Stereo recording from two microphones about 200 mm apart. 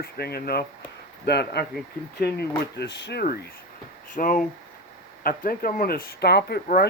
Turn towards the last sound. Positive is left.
turn(degrees=50)  # may be behind; listen again after turning